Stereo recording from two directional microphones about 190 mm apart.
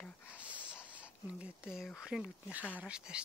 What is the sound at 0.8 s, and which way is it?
Speech, 5° right (ahead or behind).